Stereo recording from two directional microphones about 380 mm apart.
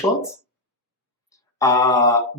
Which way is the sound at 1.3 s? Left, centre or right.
Centre.